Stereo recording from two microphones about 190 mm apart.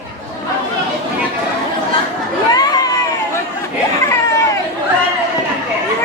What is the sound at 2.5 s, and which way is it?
Chatter, 20° left (ahead or behind).